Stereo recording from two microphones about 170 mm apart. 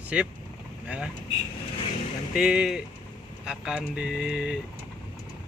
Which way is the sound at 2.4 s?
5° right (ahead or behind).